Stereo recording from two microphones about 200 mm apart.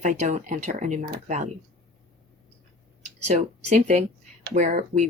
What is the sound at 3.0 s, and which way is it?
Speech, 35° right (ahead or behind).